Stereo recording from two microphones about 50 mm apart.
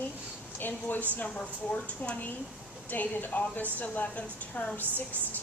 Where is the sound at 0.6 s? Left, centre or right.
Left.